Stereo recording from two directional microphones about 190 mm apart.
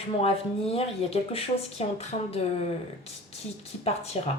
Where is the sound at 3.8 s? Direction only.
35° left (ahead or behind).